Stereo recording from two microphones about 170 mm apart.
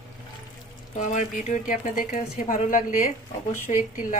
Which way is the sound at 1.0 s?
45° left (ahead or behind).